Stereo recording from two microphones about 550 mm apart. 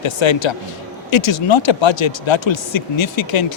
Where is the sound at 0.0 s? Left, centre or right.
Left.